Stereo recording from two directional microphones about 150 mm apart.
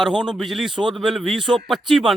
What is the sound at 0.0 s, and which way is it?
A man's voice, 5° right (ahead or behind).